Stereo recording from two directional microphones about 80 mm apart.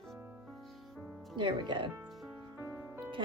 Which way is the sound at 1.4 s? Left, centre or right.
Right.